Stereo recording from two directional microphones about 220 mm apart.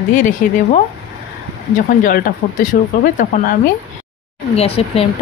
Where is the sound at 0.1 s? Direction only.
35° left (ahead or behind).